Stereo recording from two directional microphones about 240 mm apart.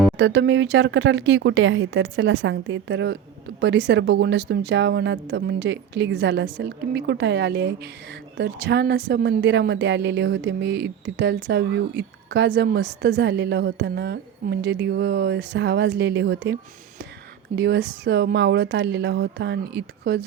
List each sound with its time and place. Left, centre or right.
0.2 s a woman's voice: right
17.6 s a woman's voice: right